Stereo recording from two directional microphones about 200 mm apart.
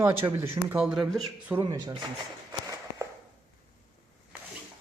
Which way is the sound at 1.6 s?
20° right (ahead or behind).